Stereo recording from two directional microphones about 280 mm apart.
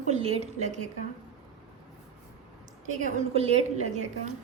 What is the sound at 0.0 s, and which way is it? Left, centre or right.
Speech, right.